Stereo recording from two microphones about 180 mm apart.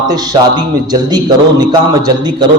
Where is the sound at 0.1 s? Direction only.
20° right (ahead or behind).